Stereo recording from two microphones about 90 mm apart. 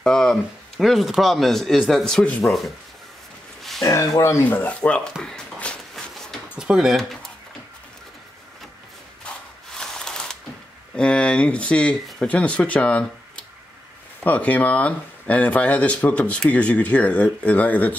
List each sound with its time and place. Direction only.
0.0 s speech: 5° left (ahead or behind)
4.5 s speech: 15° left (ahead or behind)
5.2 s a sound: 10° left (ahead or behind)
6.5 s speech: 10° right (ahead or behind)
9.8 s ratchet: 5° left (ahead or behind)
11.0 s speech: 10° left (ahead or behind)
14.2 s speech: 15° left (ahead or behind)